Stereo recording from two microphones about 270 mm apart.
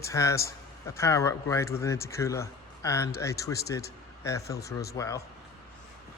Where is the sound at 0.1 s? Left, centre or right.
Centre.